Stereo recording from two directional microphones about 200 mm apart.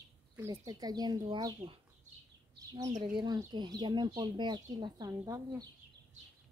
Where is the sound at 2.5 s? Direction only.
20° right (ahead or behind).